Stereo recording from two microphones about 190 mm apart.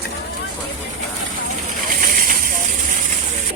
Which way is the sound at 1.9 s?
50° right (ahead or behind).